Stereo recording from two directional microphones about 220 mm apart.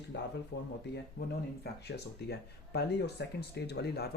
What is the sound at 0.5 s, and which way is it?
Speech, 50° left (ahead or behind).